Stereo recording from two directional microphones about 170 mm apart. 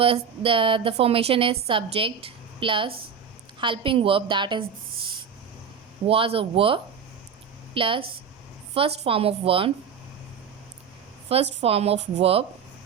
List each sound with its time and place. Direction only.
0.0 s a woman's voice: 35° right (ahead or behind)
6.1 s a woman's voice: 35° right (ahead or behind)
11.3 s a woman's voice: 35° right (ahead or behind)